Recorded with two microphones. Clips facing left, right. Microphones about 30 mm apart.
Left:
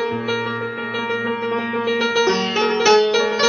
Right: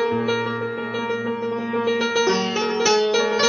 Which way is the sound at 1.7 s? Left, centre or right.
Centre.